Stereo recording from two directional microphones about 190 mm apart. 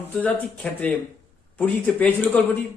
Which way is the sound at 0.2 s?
10° left (ahead or behind).